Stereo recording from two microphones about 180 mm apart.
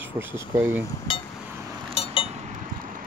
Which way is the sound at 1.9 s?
30° left (ahead or behind).